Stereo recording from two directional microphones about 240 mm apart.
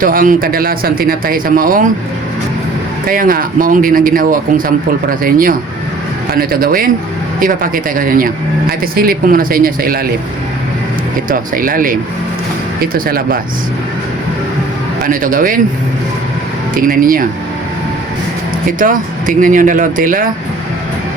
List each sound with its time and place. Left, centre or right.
0.0 s speech: right
3.1 s speech: right
11.3 s speech: right
15.0 s speech: right
16.7 s speech: right
18.8 s speech: right